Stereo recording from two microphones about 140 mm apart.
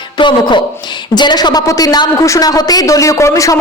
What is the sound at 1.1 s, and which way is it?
Speech, 30° left (ahead or behind).